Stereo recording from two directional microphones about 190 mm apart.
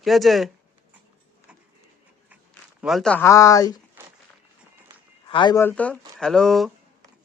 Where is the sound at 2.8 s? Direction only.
Centre (ahead or behind).